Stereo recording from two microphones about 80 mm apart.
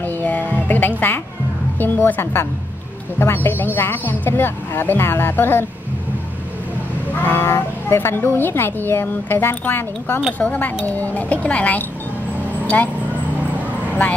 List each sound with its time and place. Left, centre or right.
0.0 s music: left
1.8 s speech: left
7.2 s speech: left